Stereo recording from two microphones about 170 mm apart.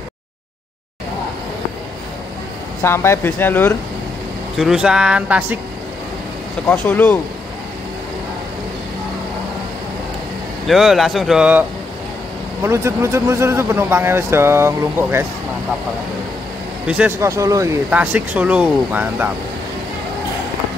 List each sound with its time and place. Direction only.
2.8 s speech: 15° left (ahead or behind)
4.6 s speech: 5° right (ahead or behind)
6.7 s speech: 5° left (ahead or behind)
10.7 s speech: centre (ahead or behind)
12.6 s a man's voice: 15° right (ahead or behind)
16.8 s a man's voice: 5° right (ahead or behind)